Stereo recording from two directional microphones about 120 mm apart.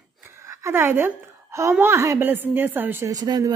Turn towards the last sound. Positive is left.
turn(degrees=-35)  # may be behind; listen again after turning